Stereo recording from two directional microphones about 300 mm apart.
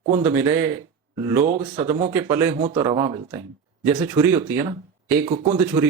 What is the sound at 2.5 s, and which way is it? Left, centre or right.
Speech, centre.